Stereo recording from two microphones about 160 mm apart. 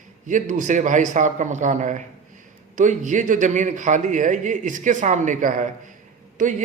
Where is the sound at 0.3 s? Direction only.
50° right (ahead or behind).